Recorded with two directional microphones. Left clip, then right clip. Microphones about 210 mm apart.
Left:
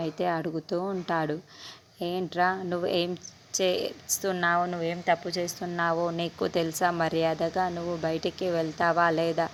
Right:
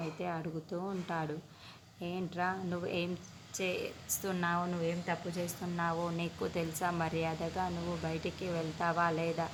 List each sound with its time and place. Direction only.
0.2 s speech: 40° left (ahead or behind)